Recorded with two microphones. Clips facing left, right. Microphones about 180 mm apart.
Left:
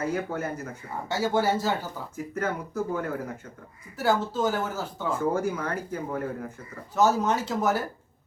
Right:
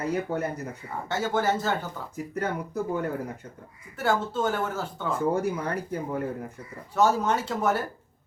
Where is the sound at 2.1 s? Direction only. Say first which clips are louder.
Even; 35° right (ahead or behind).